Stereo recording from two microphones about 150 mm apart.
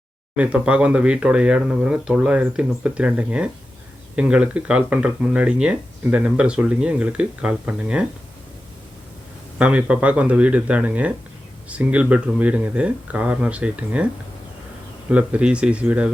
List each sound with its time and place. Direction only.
0.3 s speech: 10° right (ahead or behind)
9.6 s speech: 5° right (ahead or behind)
15.1 s speech: 10° right (ahead or behind)